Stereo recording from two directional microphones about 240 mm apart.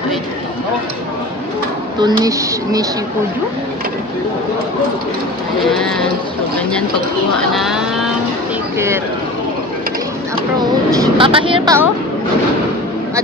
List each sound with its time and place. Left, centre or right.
2.0 s speech: centre
5.7 s speech: centre
7.5 s speech: centre
11.1 s speech: right